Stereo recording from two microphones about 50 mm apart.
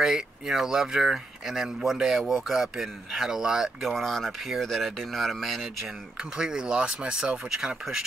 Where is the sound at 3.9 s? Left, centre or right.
Centre.